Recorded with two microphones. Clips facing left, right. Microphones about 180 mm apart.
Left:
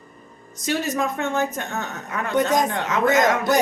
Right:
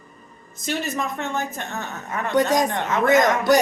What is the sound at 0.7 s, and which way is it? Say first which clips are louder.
A woman's voice: left 3 dB; 50° left (ahead or behind).